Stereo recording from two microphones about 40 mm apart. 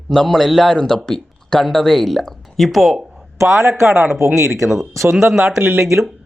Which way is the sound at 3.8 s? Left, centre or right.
Right.